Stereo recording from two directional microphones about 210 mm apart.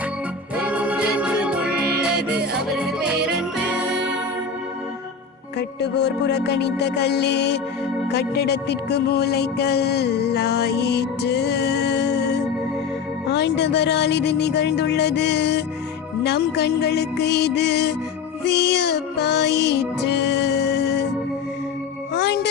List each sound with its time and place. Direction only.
0.5 s music: 5° right (ahead or behind)
5.5 s music: 55° left (ahead or behind)
22.1 s music: 50° left (ahead or behind)